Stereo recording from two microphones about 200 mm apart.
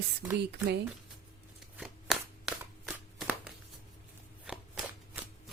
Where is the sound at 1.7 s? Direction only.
Centre (ahead or behind).